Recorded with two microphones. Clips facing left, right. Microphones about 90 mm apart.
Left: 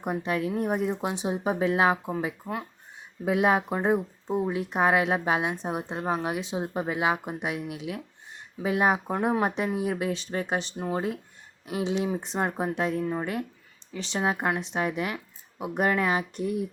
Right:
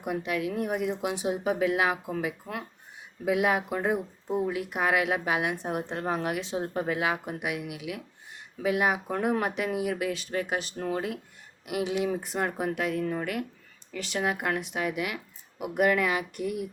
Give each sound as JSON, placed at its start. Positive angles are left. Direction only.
{"t": 0.0, "sound": "speech", "side_deg": 35}
{"t": 10.8, "sound": "speech", "side_deg": 15}
{"t": 11.6, "sound": "speech", "side_deg": 25}